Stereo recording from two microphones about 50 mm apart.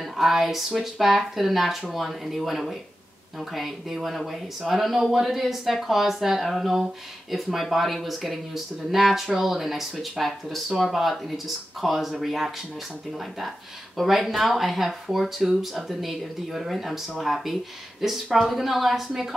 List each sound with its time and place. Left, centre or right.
0.2 s speech: centre
13.9 s speech: centre